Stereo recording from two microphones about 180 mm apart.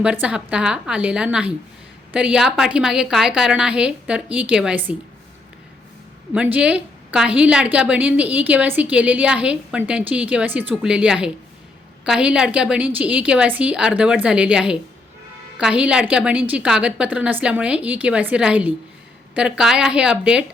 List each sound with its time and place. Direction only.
0.0 s a woman's voice: 5° right (ahead or behind)
6.3 s a woman's voice: 5° right (ahead or behind)